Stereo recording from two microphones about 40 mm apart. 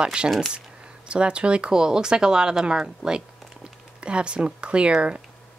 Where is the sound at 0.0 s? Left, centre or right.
Right.